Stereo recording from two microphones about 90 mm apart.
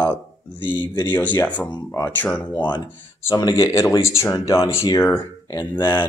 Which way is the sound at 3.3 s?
40° left (ahead or behind).